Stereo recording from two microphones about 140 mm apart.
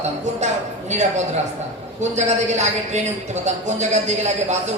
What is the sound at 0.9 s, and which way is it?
A woman's voice, 55° right (ahead or behind).